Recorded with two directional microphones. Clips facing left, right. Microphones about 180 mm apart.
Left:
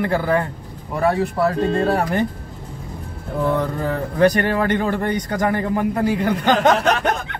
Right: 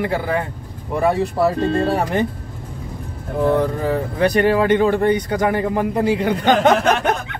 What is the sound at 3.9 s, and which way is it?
Speech, 15° right (ahead or behind).